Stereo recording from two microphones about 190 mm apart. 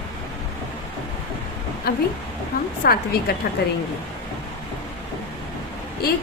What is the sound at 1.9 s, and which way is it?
A woman's voice, 55° left (ahead or behind).